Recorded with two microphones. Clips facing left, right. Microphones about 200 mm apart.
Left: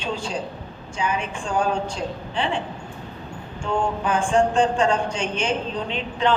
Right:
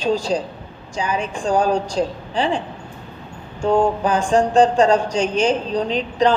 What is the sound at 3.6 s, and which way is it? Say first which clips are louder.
Speech: right 7 dB; 40° right (ahead or behind).